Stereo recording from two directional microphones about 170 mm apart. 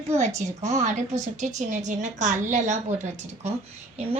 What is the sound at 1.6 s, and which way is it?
A woman's voice, 45° right (ahead or behind).